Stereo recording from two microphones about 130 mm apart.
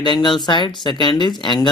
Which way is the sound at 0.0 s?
35° left (ahead or behind).